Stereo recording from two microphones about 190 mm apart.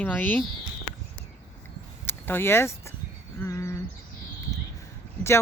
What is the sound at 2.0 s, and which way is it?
Speech, 10° left (ahead or behind).